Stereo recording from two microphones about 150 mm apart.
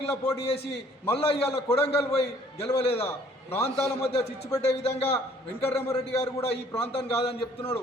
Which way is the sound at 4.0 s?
45° left (ahead or behind).